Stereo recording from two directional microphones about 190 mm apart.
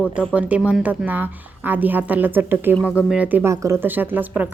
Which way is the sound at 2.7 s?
10° left (ahead or behind).